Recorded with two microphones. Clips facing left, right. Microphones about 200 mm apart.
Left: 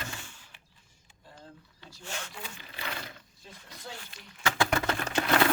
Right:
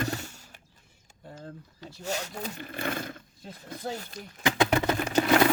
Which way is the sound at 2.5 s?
50° right (ahead or behind).